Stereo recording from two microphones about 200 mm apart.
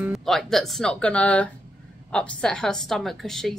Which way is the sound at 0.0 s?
Centre (ahead or behind).